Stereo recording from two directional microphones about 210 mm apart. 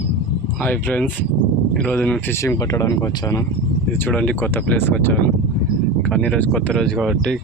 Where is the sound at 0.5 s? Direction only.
10° left (ahead or behind).